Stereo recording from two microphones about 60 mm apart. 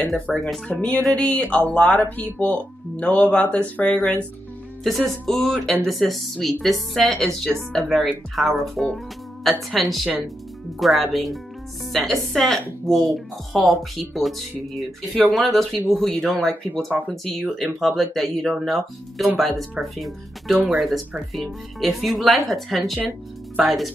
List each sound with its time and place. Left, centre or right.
0.0 s speech: centre
0.7 s speech: left
4.8 s speech: centre